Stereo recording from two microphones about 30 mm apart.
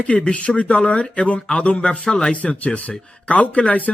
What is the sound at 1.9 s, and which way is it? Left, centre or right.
Speech, left.